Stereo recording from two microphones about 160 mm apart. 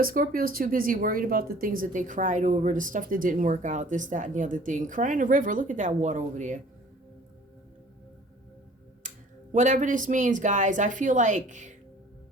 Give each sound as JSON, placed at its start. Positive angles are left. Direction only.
{"t": 0.0, "sound": "speech", "side_deg": -60}
{"t": 9.0, "sound": "speech", "side_deg": -50}